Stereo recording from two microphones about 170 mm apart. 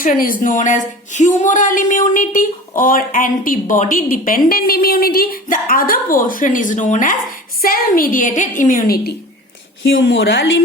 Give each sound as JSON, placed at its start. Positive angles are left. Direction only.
{"t": 0.0, "sound": "speech", "side_deg": 55}
{"t": 9.8, "sound": "a woman's voice", "side_deg": 90}